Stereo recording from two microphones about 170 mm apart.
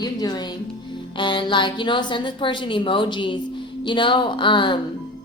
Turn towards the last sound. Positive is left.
turn(degrees=30)  # may be behind; listen again after turning